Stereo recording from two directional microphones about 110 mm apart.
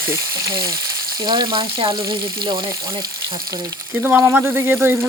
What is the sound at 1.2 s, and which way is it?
Speech, 40° right (ahead or behind).